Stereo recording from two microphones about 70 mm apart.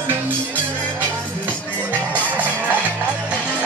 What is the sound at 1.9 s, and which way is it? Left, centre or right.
Music, right.